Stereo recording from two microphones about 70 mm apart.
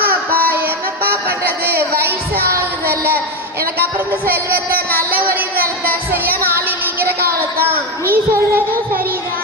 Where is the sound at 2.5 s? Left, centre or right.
Right.